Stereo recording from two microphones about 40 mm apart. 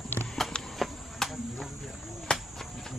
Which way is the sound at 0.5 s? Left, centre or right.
Left.